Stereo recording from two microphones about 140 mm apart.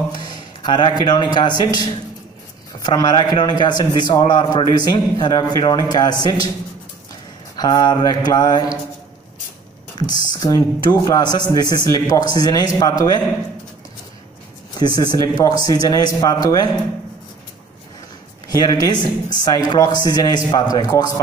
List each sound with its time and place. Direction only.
0.1 s a man's voice: 30° left (ahead or behind)
7.5 s a man's voice: 30° left (ahead or behind)
9.9 s a man's voice: 30° left (ahead or behind)
14.8 s a man's voice: 30° left (ahead or behind)
18.5 s a man's voice: 25° left (ahead or behind)